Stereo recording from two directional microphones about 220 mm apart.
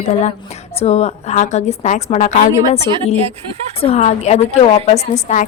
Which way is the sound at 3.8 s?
30° left (ahead or behind).